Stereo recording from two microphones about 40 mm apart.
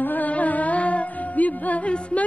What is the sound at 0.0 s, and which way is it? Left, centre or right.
Carnatic music, left.